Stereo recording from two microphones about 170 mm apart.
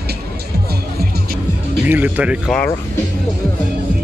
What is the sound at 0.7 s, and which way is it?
Music, 65° right (ahead or behind).